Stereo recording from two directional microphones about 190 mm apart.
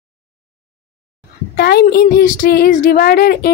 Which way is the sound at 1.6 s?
55° left (ahead or behind).